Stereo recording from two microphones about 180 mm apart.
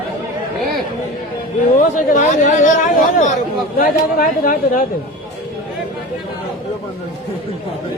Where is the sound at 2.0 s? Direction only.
45° left (ahead or behind).